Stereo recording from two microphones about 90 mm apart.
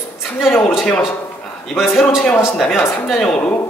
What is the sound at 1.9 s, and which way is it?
Speech, 25° left (ahead or behind).